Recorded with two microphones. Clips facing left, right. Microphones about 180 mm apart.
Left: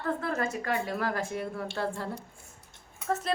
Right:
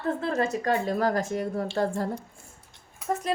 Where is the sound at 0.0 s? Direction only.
25° right (ahead or behind); by 1.9 s 40° right (ahead or behind).